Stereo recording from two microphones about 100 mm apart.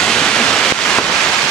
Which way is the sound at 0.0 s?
5° left (ahead or behind).